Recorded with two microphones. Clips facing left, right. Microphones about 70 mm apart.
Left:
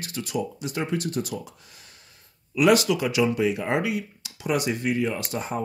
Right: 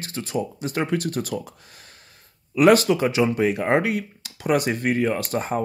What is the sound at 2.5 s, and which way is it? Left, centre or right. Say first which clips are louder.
Speech: right 4 dB; right.